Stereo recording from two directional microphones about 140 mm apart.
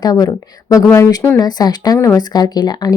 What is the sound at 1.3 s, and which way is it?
A woman's voice, 30° left (ahead or behind).